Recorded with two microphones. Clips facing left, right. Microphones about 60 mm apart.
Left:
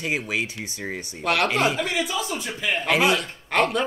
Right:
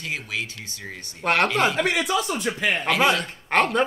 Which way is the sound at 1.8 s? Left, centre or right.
Right.